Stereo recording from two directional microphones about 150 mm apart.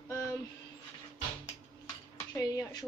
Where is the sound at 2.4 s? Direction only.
25° left (ahead or behind).